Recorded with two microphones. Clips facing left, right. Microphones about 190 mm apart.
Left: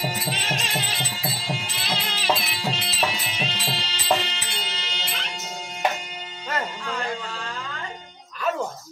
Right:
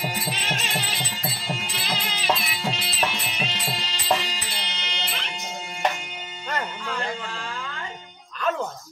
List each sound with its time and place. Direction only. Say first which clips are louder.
0.0 s music: left 1 dB; centre (ahead or behind)